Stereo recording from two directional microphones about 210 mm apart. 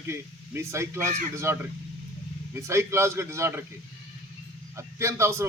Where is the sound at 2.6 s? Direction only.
15° right (ahead or behind).